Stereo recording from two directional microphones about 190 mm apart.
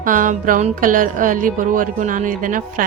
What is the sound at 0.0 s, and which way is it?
Speech, 45° right (ahead or behind).